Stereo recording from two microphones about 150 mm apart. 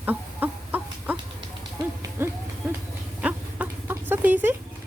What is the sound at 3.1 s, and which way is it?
Chicken, 10° right (ahead or behind).